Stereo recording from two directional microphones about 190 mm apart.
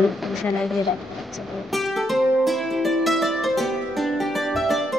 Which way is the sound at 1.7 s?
Centre (ahead or behind).